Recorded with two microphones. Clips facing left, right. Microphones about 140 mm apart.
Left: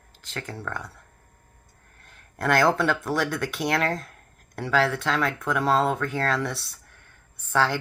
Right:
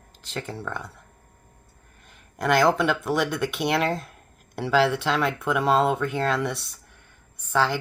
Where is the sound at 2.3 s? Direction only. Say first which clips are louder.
Right 1 dB; 15° right (ahead or behind).